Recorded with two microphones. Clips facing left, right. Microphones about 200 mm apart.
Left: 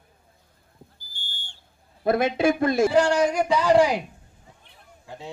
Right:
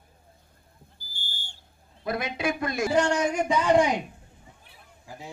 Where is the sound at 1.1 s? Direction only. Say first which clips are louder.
Right 1 dB; 45° right (ahead or behind).